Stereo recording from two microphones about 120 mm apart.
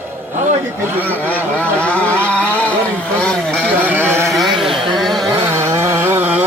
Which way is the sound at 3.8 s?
15° right (ahead or behind).